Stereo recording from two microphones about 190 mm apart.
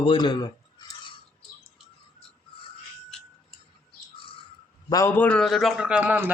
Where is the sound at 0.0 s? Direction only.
25° left (ahead or behind).